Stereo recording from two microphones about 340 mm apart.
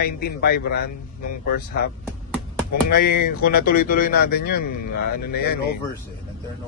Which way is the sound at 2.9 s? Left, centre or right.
Left.